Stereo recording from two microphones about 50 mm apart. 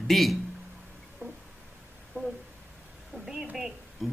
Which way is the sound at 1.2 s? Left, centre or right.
Right.